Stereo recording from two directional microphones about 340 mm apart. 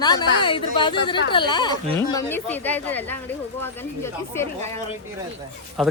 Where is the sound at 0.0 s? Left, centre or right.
Centre.